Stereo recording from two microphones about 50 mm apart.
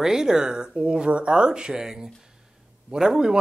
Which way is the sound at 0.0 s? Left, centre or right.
Centre.